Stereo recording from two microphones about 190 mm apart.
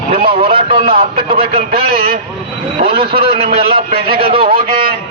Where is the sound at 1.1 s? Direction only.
50° right (ahead or behind).